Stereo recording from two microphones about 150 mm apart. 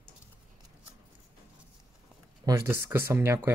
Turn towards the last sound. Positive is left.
turn(degrees=-20)  # may be behind; listen again after turning